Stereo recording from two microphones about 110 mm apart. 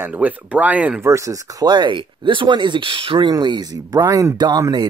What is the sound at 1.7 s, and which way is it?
Speech, 45° right (ahead or behind).